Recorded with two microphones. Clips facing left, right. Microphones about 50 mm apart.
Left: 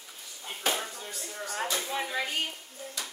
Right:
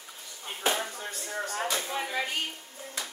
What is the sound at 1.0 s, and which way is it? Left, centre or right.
Speech, right.